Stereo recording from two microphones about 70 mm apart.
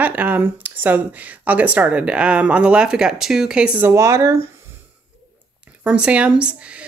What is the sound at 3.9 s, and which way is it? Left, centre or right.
Speech, right.